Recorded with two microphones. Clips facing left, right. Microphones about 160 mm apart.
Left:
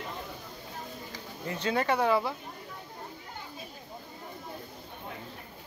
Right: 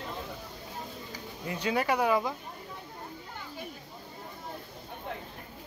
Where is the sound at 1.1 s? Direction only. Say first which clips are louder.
Even; 15° right (ahead or behind).